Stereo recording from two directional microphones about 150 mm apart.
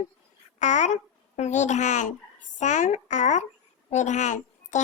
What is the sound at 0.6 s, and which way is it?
A child's voice, 55° left (ahead or behind).